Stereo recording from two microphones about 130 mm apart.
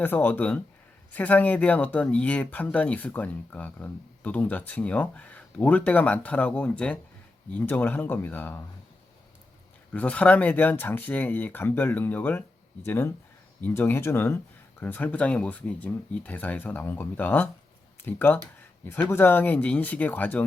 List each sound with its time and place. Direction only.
0.0 s speech: 15° left (ahead or behind)
9.9 s speech: 10° left (ahead or behind)